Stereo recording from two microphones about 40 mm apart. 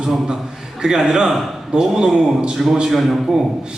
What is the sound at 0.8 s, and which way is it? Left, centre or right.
A man's voice, centre.